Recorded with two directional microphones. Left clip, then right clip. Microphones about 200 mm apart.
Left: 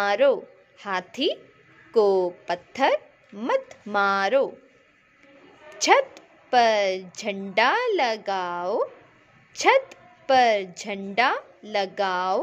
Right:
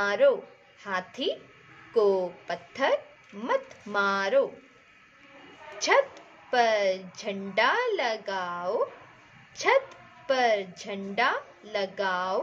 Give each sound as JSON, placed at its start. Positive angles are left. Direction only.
{"t": 0.0, "sound": "a woman's voice", "side_deg": 40}
{"t": 5.8, "sound": "a woman's voice", "side_deg": 40}